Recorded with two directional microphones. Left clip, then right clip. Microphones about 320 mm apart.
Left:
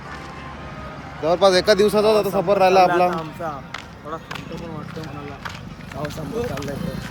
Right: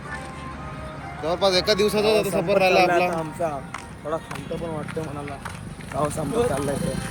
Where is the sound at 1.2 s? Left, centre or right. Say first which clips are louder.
Left 5 dB; left.